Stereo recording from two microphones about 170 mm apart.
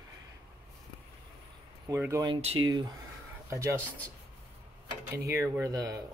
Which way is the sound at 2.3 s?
40° right (ahead or behind).